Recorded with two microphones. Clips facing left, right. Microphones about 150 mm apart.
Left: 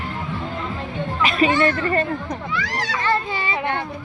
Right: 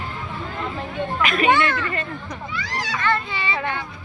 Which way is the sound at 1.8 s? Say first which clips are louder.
Left 6 dB; 40° left (ahead or behind).